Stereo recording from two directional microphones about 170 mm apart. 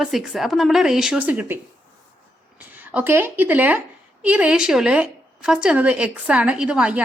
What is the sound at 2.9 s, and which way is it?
A woman's voice, 10° right (ahead or behind).